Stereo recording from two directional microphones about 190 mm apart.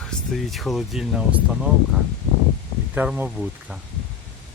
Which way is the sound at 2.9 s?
10° right (ahead or behind).